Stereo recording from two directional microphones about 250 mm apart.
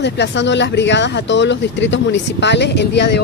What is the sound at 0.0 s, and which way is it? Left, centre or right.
Speech, left.